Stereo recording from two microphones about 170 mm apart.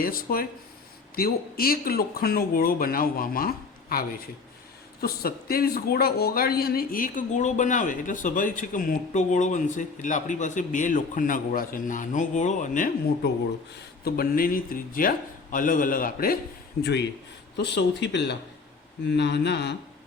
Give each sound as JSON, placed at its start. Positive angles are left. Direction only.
{"t": 0.0, "sound": "a man's voice", "side_deg": 55}
{"t": 14.0, "sound": "a man's voice", "side_deg": 60}
{"t": 17.6, "sound": "speech", "side_deg": 90}